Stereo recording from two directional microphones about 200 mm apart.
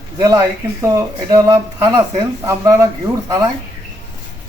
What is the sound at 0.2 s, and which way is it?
Speech, 15° right (ahead or behind).